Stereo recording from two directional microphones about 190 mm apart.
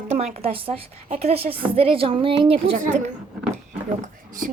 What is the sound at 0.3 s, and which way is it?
A woman's voice, 30° right (ahead or behind).